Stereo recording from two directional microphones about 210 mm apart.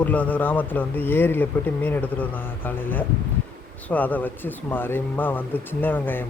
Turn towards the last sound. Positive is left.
turn(degrees=10)  # may be behind; listen again after turning